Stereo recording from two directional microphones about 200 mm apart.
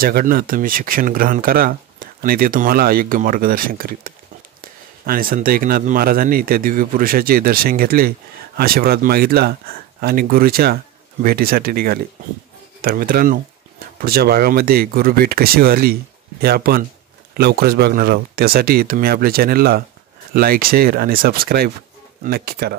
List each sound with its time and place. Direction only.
0.0 s speech: 45° right (ahead or behind)